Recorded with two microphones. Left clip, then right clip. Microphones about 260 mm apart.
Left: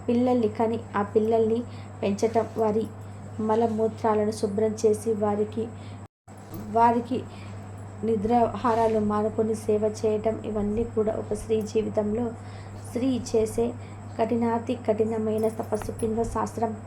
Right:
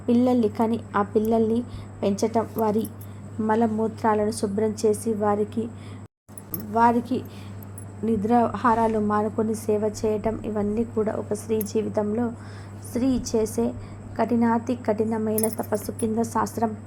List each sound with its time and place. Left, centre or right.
0.1 s speech: centre
6.7 s a woman's voice: centre